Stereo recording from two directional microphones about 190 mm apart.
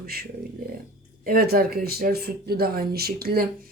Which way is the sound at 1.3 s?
55° right (ahead or behind).